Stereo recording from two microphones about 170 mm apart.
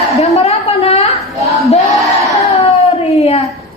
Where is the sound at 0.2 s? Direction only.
40° left (ahead or behind).